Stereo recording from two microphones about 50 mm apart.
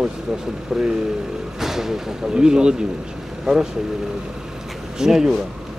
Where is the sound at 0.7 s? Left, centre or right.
Centre.